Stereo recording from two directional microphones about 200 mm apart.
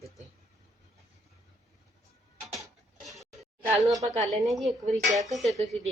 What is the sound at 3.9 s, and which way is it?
Speech, 20° right (ahead or behind).